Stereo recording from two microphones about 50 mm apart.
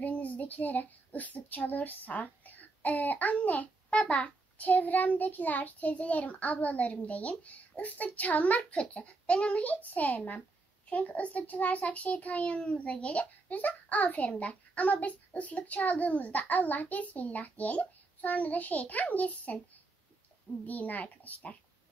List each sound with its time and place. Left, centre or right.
0.0 s a child's voice: left
20.6 s a child's voice: left